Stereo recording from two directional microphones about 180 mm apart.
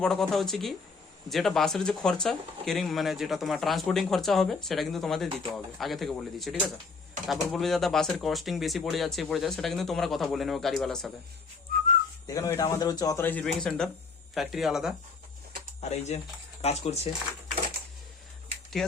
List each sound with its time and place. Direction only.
0.0 s speech: centre (ahead or behind)
11.7 s whistling: 55° right (ahead or behind)
12.3 s speech: 20° left (ahead or behind); by 14.9 s centre (ahead or behind)
15.8 s speech: 40° left (ahead or behind)
18.8 s speech: 5° left (ahead or behind)